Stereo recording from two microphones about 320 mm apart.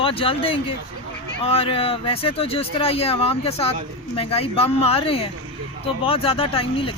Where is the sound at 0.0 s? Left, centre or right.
Centre.